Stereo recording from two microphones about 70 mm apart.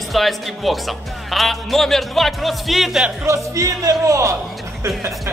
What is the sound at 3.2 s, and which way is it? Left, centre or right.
Speech, right.